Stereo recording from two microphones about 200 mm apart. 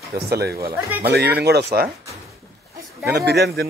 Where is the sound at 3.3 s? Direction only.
55° right (ahead or behind).